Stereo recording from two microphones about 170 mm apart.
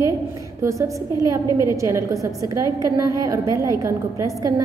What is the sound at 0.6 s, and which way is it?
A woman's voice, 20° right (ahead or behind).